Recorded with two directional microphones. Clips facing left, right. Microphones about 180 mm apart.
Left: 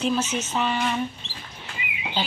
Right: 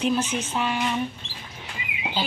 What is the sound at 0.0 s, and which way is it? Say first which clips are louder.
Speech: even; 15° right (ahead or behind).